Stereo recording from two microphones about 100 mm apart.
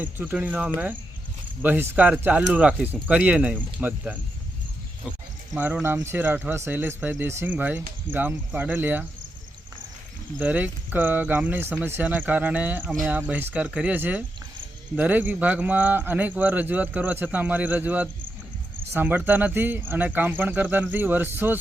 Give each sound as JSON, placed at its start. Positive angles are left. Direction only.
{"t": 0.0, "sound": "speech", "side_deg": -20}
{"t": 5.8, "sound": "speech", "side_deg": -25}
{"t": 10.4, "sound": "speech", "side_deg": -15}